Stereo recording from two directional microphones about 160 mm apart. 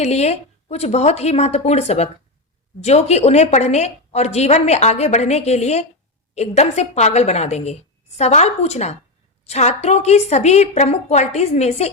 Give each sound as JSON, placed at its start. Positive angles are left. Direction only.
{"t": 0.0, "sound": "a woman's voice", "side_deg": 40}